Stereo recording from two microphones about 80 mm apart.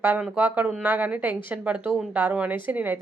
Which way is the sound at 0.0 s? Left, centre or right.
Right.